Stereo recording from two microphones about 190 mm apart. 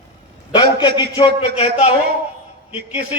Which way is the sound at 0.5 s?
25° left (ahead or behind).